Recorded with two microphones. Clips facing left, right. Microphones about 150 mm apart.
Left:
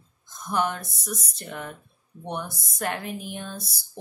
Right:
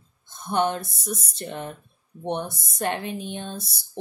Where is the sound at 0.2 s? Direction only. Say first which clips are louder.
Right 3 dB; 30° right (ahead or behind).